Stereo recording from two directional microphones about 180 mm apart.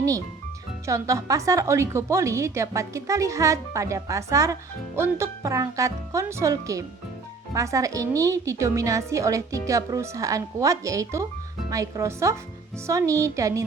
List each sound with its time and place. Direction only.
0.9 s a woman's voice: 15° right (ahead or behind)